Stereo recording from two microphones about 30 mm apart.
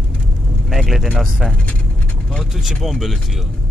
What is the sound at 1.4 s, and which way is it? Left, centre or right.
Speech, centre.